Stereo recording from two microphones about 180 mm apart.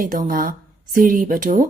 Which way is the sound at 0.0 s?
50° right (ahead or behind).